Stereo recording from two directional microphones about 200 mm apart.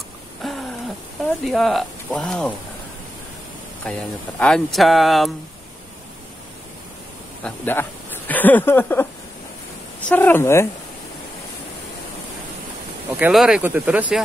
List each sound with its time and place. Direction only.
0.4 s a sound: centre (ahead or behind)
1.4 s speech: centre (ahead or behind)
3.8 s speech: 5° left (ahead or behind)
7.4 s speech: 10° left (ahead or behind)
10.0 s speech: 10° left (ahead or behind)
13.2 s speech: centre (ahead or behind)